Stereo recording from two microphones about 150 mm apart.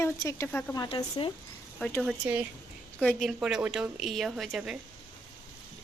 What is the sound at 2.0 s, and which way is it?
Speech, 10° right (ahead or behind).